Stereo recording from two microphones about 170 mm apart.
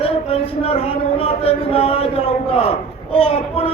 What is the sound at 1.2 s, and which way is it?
A man's voice, 35° left (ahead or behind).